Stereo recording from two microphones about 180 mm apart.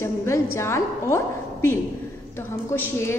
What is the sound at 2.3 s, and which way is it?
Speech, 10° left (ahead or behind).